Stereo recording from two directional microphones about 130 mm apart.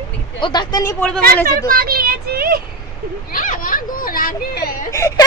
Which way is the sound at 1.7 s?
90° right.